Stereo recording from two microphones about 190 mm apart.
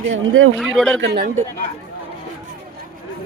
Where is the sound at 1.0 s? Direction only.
85° right.